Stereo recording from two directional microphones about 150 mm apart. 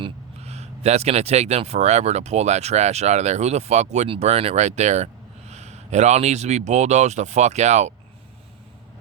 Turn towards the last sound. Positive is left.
turn(degrees=-50)  # may be behind; listen again after turning